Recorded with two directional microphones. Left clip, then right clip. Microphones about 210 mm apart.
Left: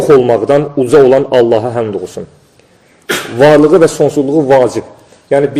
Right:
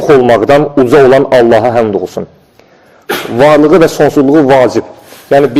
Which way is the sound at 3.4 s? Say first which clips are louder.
Right 1 dB; 20° right (ahead or behind).